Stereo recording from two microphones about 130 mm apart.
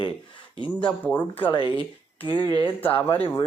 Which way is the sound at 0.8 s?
10° left (ahead or behind).